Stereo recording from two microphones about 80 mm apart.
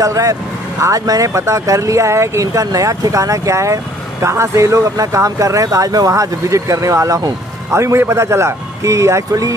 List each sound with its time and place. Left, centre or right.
0.0 s speech: right